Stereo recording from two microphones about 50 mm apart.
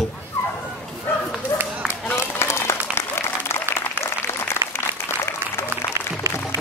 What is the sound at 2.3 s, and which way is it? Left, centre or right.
Applause, left.